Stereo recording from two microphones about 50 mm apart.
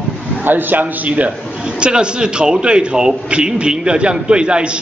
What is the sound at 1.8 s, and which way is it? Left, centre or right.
A man's voice, centre.